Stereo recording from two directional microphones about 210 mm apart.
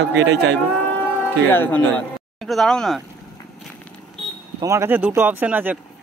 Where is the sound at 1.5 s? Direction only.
10° left (ahead or behind).